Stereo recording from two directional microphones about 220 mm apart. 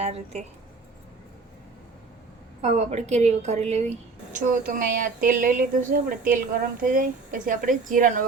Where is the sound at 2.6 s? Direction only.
30° right (ahead or behind).